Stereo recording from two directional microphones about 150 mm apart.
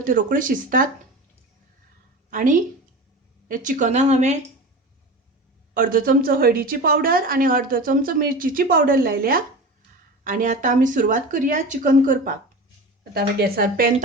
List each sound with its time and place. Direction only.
0.0 s a woman's voice: 65° right (ahead or behind)
2.3 s a woman's voice: 65° right (ahead or behind)
5.7 s a woman's voice: 70° right (ahead or behind)
10.2 s a woman's voice: 55° right (ahead or behind)
13.1 s speech: 85° right